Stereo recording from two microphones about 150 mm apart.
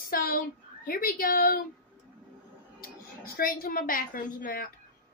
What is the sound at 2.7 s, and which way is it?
A woman's voice, 75° left (ahead or behind).